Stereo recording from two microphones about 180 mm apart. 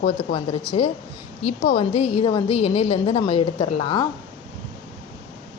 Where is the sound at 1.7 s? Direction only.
30° left (ahead or behind).